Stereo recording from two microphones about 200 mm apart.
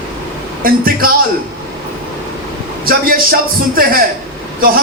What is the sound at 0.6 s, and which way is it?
Speech, 45° right (ahead or behind).